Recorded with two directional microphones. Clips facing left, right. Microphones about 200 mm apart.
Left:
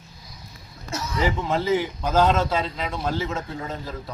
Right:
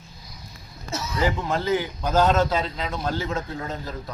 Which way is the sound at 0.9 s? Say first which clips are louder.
Even; 5° right (ahead or behind).